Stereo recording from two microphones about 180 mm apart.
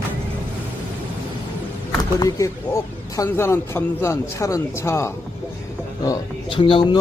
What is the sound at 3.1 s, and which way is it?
A man's voice, 15° left (ahead or behind).